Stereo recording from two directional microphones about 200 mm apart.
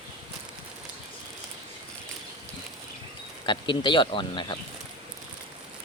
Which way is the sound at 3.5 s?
25° left (ahead or behind).